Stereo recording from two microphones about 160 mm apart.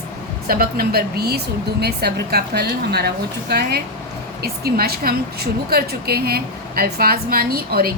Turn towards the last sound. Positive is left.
turn(degrees=-75)  # may be behind; listen again after turning